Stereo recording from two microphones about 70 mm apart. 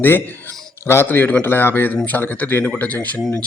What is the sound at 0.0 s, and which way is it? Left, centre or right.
A man's voice, left.